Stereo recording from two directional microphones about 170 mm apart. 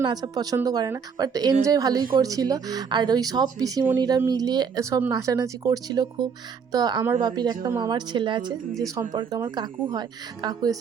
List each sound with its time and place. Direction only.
0.0 s speech: 25° right (ahead or behind)